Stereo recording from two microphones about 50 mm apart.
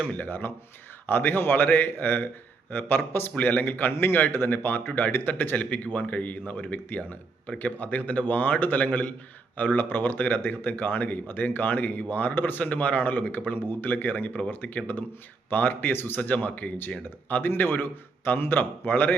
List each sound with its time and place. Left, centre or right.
0.2 s a man's voice: left